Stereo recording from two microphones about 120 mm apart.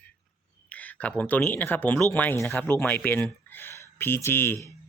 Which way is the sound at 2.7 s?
15° left (ahead or behind).